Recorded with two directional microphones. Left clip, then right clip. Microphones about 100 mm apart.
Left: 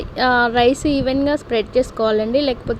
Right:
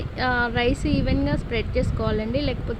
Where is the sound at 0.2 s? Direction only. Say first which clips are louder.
Left 8 dB; 45° left (ahead or behind).